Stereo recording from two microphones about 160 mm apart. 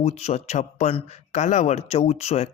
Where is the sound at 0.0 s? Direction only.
45° left (ahead or behind).